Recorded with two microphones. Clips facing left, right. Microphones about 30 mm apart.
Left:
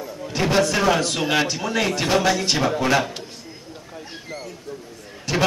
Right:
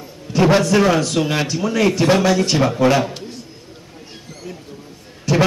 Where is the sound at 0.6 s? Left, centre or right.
Centre.